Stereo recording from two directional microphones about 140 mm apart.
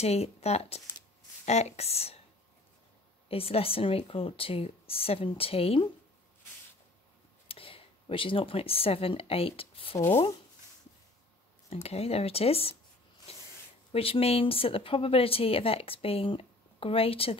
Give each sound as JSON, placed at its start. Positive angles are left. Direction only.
{"t": 0.0, "sound": "speech", "side_deg": 50}
{"t": 3.3, "sound": "speech", "side_deg": 45}
{"t": 7.4, "sound": "speech", "side_deg": 40}
{"t": 11.7, "sound": "speech", "side_deg": 45}
{"t": 13.3, "sound": "a sound", "side_deg": 45}
{"t": 13.9, "sound": "speech", "side_deg": 45}